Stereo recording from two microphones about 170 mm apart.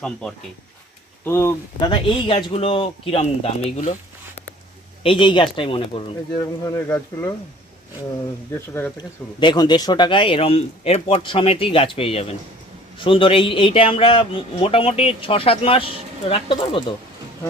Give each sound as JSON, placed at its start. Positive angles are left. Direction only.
{"t": 0.0, "sound": "speech", "side_deg": 5}
{"t": 1.9, "sound": "speech", "side_deg": 30}
{"t": 5.0, "sound": "speech", "side_deg": 30}
{"t": 6.3, "sound": "speech", "side_deg": 20}
{"t": 8.5, "sound": "speech", "side_deg": 15}
{"t": 9.4, "sound": "speech", "side_deg": 25}